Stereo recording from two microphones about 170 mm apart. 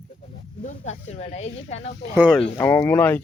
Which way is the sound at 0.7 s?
40° left (ahead or behind).